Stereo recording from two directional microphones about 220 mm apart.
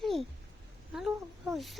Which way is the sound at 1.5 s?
Centre (ahead or behind).